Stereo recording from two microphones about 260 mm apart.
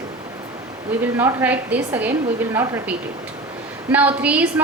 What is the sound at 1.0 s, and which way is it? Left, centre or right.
A woman's voice, centre.